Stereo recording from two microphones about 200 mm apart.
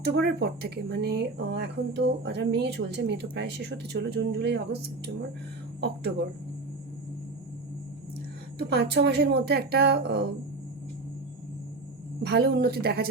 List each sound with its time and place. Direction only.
0.0 s speech: 55° right (ahead or behind)
8.5 s speech: 55° right (ahead or behind)
12.2 s speech: 50° right (ahead or behind)